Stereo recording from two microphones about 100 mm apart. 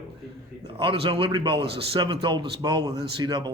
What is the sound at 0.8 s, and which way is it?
A man's voice, 65° right (ahead or behind).